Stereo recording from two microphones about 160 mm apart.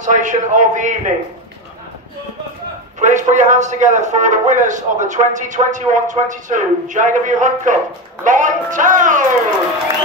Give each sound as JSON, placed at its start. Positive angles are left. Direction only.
{"t": 0.0, "sound": "a man's voice", "side_deg": -50}
{"t": 3.0, "sound": "a man's voice", "side_deg": -50}